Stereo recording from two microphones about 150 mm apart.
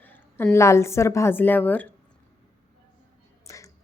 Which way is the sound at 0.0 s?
10° left (ahead or behind).